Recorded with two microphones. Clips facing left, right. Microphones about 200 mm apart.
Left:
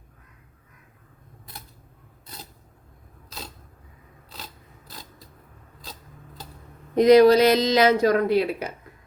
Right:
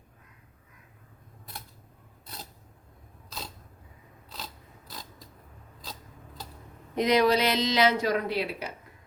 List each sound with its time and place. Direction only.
6.9 s speech: 40° left (ahead or behind)